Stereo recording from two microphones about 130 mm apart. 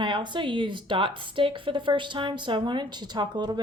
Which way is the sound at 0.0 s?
40° right (ahead or behind).